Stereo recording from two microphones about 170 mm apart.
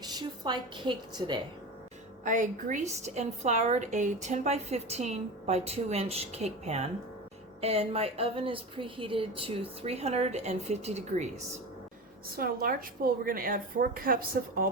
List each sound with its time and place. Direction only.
0.0 s a woman's voice: 25° right (ahead or behind)
2.2 s a woman's voice: 50° right (ahead or behind)
12.4 s a woman's voice: 60° right (ahead or behind)